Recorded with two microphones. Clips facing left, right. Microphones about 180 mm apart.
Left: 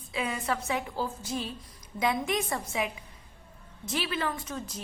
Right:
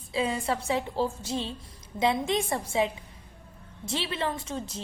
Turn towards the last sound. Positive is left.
turn(degrees=-25)  # may be behind; listen again after turning